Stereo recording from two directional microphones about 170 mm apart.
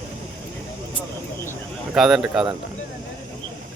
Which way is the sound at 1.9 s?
Centre (ahead or behind).